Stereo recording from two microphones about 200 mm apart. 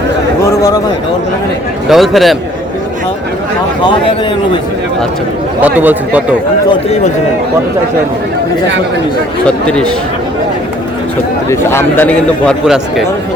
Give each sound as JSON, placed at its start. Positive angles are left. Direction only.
{"t": 0.5, "sound": "a man's voice", "side_deg": 20}
{"t": 1.9, "sound": "speech", "side_deg": 0}
{"t": 5.6, "sound": "speech", "side_deg": -10}
{"t": 9.5, "sound": "speech", "side_deg": 5}
{"t": 11.4, "sound": "a man's voice", "side_deg": 15}